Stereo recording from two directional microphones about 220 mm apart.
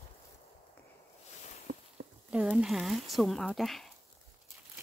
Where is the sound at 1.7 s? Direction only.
35° right (ahead or behind).